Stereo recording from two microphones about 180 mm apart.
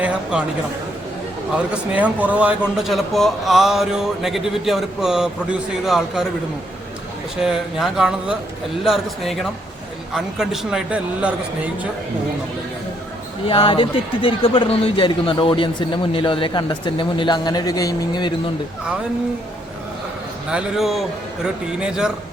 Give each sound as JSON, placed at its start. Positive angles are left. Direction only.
{"t": 0.0, "sound": "a sound", "side_deg": -5}
{"t": 1.5, "sound": "a man's voice", "side_deg": -5}
{"t": 7.4, "sound": "a man's voice", "side_deg": 0}
{"t": 13.5, "sound": "speech", "side_deg": 30}
{"t": 20.5, "sound": "a man's voice", "side_deg": -5}